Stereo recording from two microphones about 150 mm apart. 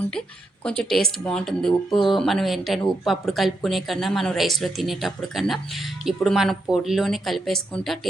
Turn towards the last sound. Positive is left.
turn(degrees=5)  # may be behind; listen again after turning